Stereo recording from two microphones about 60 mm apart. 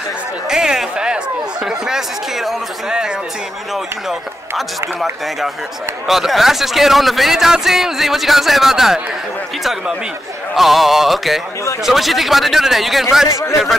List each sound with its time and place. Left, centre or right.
0.5 s a man's voice: centre
6.0 s a man's voice: centre
13.3 s a man's voice: left